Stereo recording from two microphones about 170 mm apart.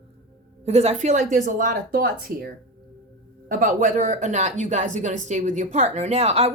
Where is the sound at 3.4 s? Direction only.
50° right (ahead or behind).